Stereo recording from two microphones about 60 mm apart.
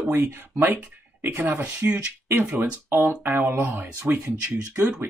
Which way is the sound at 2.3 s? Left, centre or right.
Right.